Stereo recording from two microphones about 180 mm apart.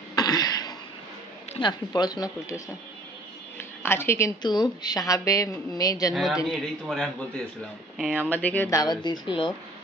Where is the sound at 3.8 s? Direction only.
15° left (ahead or behind).